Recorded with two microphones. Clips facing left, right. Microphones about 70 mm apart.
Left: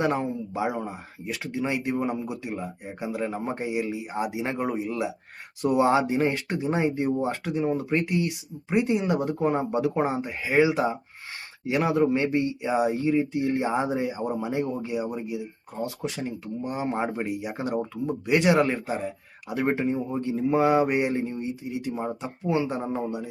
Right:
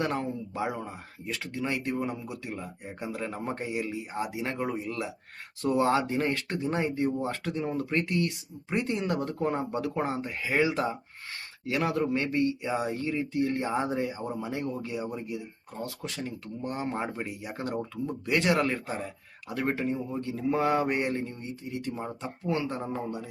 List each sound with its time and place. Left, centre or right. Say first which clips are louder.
0.0 s speech: left 5 dB; centre